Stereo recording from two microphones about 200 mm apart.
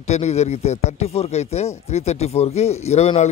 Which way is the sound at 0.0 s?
35° left (ahead or behind).